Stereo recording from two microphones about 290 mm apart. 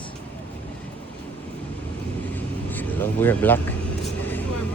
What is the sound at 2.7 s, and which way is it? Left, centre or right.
Vehicle, centre.